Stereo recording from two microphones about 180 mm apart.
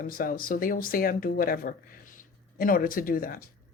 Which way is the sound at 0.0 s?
50° left (ahead or behind).